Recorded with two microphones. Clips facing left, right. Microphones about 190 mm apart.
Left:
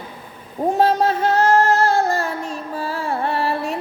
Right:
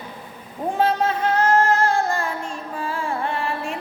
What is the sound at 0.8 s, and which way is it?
Music, 40° left (ahead or behind).